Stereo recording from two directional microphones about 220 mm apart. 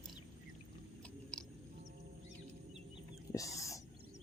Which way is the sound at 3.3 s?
15° left (ahead or behind).